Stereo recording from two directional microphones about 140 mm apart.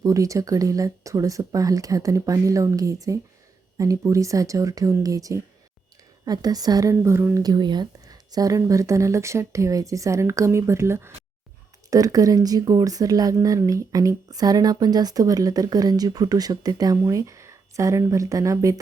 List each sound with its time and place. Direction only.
0.0 s speech: 25° right (ahead or behind)
7.4 s speech: 30° right (ahead or behind)